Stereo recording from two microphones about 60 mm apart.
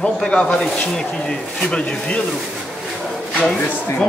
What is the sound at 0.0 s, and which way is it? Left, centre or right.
Speech, centre.